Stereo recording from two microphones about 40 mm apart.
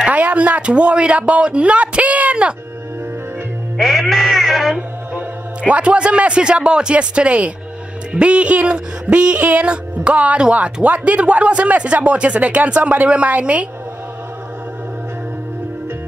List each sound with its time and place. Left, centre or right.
0.1 s a sound: right
0.6 s speech: right
3.7 s music: centre
5.1 s a man's voice: right
9.4 s speech: right
9.7 s speech: right